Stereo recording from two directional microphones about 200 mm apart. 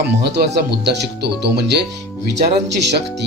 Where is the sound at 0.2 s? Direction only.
55° right (ahead or behind).